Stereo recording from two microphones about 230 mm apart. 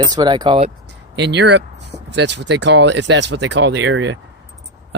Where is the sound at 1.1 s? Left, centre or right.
Right.